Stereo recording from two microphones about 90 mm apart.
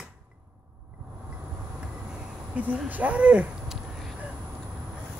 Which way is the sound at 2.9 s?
15° right (ahead or behind).